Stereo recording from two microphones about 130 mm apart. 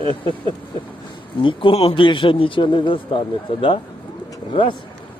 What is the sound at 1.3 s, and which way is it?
A man's voice, 40° left (ahead or behind).